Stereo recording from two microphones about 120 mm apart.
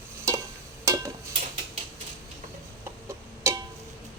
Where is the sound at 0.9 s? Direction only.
25° right (ahead or behind).